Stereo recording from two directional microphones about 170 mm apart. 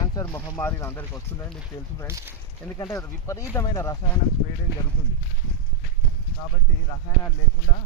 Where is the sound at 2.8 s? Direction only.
15° left (ahead or behind).